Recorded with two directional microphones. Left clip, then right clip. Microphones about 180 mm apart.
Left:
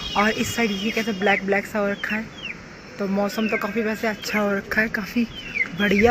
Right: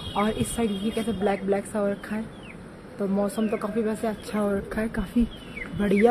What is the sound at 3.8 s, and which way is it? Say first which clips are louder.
Speech: left 3 dB; 5° right (ahead or behind).